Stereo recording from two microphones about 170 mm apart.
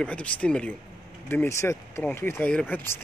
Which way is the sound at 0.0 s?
5° left (ahead or behind).